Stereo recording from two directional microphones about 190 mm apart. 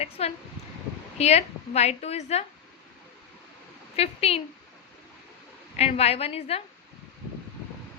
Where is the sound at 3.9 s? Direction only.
30° left (ahead or behind).